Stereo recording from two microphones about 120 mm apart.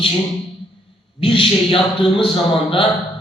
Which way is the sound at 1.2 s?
45° left (ahead or behind).